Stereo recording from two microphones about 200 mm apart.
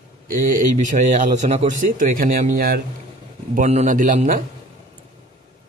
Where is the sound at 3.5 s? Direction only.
35° right (ahead or behind).